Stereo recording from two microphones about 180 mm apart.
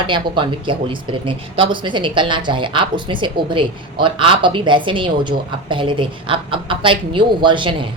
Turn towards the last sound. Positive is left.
turn(degrees=-25)  # may be behind; listen again after turning